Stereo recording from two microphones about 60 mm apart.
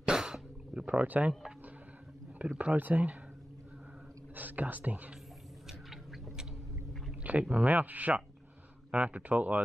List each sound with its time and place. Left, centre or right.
0.0 s sneeze: centre
0.8 s speech: right
2.3 s speech: centre
4.4 s speech: right
5.7 s a sound: centre
7.2 s speech: right